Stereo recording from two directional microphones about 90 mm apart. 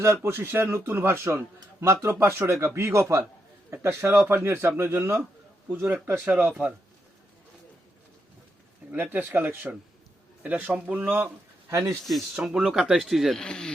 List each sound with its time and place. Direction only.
0.0 s a man's voice: 25° right (ahead or behind)
8.9 s a man's voice: 20° right (ahead or behind)
11.7 s a man's voice: 35° right (ahead or behind)
12.0 s speech: centre (ahead or behind)
13.4 s speech: 10° left (ahead or behind)